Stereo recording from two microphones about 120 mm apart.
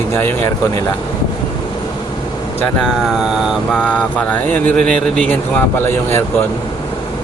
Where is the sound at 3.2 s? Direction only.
5° right (ahead or behind).